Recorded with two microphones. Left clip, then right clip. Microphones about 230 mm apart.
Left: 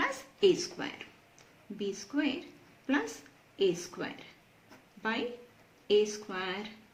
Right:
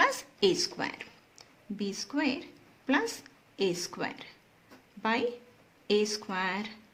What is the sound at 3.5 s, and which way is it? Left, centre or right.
Speech, right.